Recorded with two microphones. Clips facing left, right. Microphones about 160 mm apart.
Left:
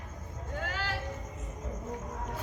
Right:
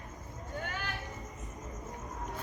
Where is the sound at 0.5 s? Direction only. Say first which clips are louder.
Left 3 dB; 90° left.